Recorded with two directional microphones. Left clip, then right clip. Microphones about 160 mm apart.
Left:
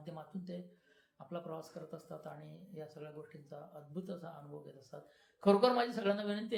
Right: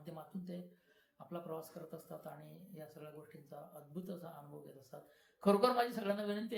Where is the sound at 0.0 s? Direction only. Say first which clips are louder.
Left 2 dB; 15° left (ahead or behind).